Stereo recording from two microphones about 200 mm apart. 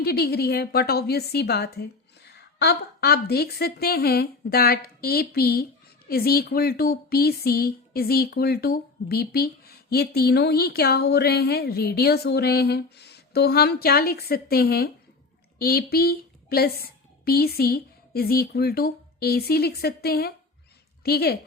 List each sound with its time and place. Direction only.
0.0 s a woman's voice: 50° left (ahead or behind)